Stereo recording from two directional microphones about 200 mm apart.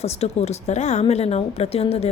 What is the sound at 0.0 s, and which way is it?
A woman's voice, 30° left (ahead or behind).